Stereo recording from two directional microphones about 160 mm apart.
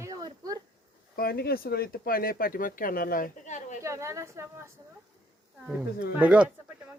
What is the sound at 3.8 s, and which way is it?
Speech, 15° right (ahead or behind).